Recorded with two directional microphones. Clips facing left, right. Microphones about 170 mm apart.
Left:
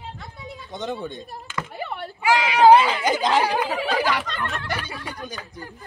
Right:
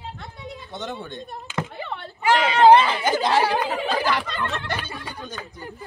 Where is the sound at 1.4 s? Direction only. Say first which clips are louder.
Right 4 dB; 20° right (ahead or behind).